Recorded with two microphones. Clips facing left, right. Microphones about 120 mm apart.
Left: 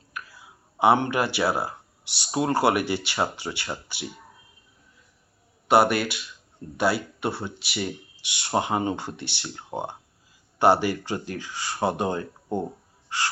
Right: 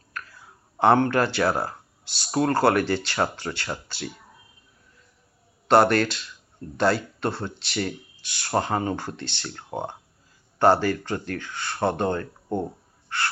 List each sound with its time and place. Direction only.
0.8 s speech: 15° left (ahead or behind)
5.6 s speech: 10° left (ahead or behind)